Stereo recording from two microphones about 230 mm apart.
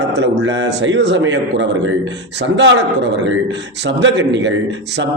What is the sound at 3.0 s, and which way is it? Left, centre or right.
A man's voice, right.